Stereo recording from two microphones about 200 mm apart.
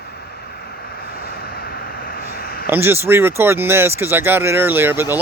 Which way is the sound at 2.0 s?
45° left (ahead or behind).